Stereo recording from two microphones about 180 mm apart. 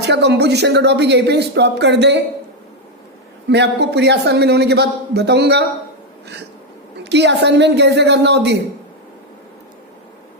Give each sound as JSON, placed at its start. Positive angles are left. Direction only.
{"t": 0.0, "sound": "speech", "side_deg": -70}
{"t": 3.5, "sound": "speech", "side_deg": -70}
{"t": 7.0, "sound": "speech", "side_deg": -70}